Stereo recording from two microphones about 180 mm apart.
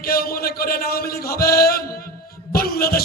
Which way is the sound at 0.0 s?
55° left (ahead or behind).